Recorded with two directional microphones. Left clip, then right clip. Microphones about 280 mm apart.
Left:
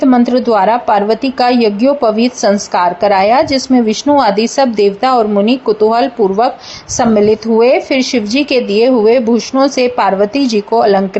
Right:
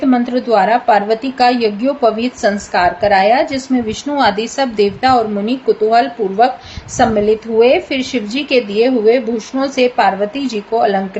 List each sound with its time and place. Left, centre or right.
0.0 s a woman's voice: left